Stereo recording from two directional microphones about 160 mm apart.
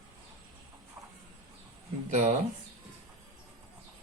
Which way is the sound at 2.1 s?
45° right (ahead or behind).